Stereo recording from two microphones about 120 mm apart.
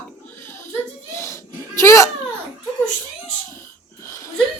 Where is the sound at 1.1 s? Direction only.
25° left (ahead or behind).